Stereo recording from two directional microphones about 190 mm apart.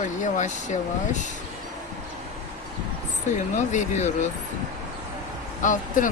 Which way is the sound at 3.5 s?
40° left (ahead or behind).